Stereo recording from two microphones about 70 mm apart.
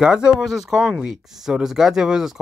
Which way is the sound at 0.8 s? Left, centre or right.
Centre.